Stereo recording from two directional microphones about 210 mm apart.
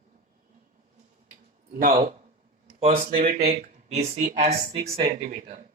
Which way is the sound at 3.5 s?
30° right (ahead or behind).